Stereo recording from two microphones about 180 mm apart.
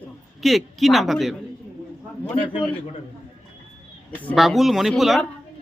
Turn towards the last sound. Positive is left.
turn(degrees=0)  # may be behind; listen again after turning